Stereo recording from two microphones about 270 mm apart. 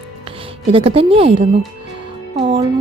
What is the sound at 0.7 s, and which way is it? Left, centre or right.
Speech, centre.